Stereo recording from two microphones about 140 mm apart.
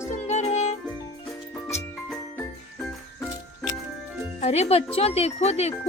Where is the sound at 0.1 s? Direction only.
55° left (ahead or behind).